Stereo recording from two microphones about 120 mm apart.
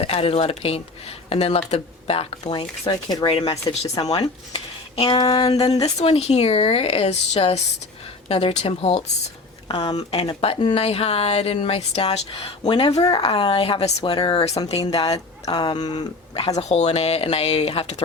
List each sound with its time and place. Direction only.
0.0 s speech: 55° left (ahead or behind)
2.4 s speech: 35° left (ahead or behind); by 3.8 s 50° left (ahead or behind)
4.1 s speech: 35° left (ahead or behind)
5.6 s speech: 65° left (ahead or behind); by 14.5 s 45° left (ahead or behind)
14.8 s speech: 35° left (ahead or behind)
16.6 s speech: 65° left (ahead or behind)